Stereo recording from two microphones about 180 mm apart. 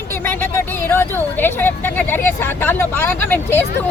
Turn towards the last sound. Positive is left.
turn(degrees=10)  # may be behind; listen again after turning